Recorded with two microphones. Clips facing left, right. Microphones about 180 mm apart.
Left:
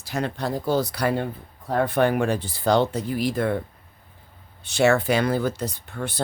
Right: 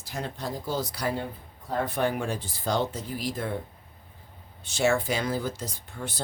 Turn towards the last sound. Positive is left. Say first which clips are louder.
# left 6 dB
turn(degrees=65)  # may be behind; listen again after turning